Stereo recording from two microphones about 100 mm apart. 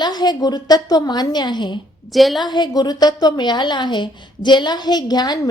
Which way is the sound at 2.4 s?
45° left (ahead or behind).